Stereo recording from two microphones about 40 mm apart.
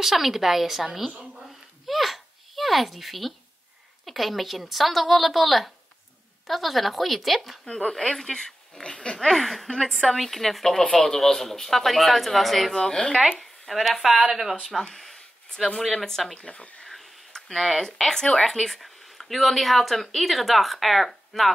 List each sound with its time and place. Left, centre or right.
0.0 s speech: centre
1.9 s babbling: centre
4.0 s speech: centre
7.6 s speech: left
9.3 s speech: centre
10.8 s speech: left
11.1 s speech: centre
12.7 s speech: centre
13.4 s speech: centre
14.3 s speech: centre
15.0 s a sound: centre
15.8 s speech: centre
16.4 s speech: left
17.6 s speech: centre